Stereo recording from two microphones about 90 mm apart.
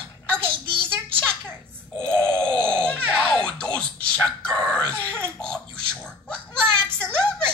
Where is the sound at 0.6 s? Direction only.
70° right (ahead or behind).